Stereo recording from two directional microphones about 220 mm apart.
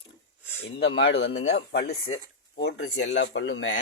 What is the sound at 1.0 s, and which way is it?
Speech, 55° left (ahead or behind).